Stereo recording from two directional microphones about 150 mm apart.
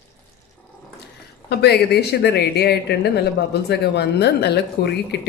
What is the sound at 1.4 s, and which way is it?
Speech, 90° left.